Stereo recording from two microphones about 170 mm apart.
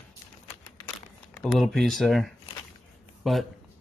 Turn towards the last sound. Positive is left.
turn(degrees=0)  # may be behind; listen again after turning